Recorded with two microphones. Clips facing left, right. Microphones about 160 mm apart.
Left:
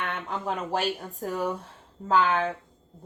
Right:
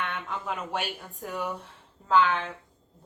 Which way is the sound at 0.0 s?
40° left (ahead or behind).